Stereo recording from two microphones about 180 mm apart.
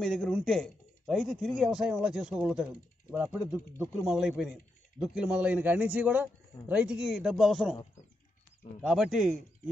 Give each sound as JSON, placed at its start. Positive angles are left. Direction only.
{"t": 0.0, "sound": "speech", "side_deg": 5}
{"t": 3.5, "sound": "a man's voice", "side_deg": -15}
{"t": 4.0, "sound": "a man's voice", "side_deg": -5}
{"t": 8.8, "sound": "speech", "side_deg": 0}